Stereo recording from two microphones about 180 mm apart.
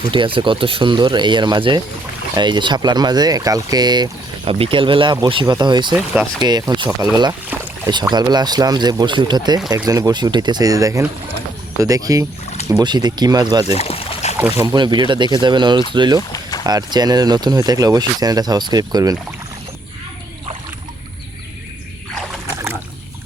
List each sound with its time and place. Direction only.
0.1 s speech: 30° right (ahead or behind)
7.5 s speech: 10° right (ahead or behind)
8.1 s speech: 25° right (ahead or behind)
13.7 s pour: 35° left (ahead or behind)
14.3 s speech: 15° right (ahead or behind)
16.3 s boat: 20° left (ahead or behind)
16.6 s speech: 20° right (ahead or behind)